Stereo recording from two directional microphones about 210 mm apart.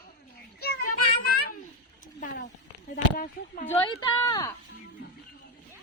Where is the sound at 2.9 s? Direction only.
40° left (ahead or behind).